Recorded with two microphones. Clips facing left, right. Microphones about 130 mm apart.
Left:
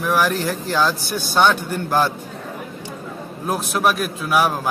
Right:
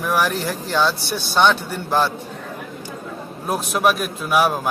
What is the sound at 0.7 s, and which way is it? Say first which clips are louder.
Speech: right 1 dB; 5° left (ahead or behind).